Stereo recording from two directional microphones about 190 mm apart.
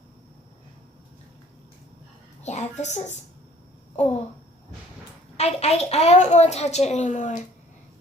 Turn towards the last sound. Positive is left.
turn(degrees=40)  # may be behind; listen again after turning